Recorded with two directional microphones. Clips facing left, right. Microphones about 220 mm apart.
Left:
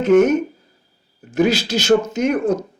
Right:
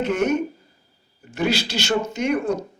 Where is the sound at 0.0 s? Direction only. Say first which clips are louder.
Left 8 dB; 45° left (ahead or behind).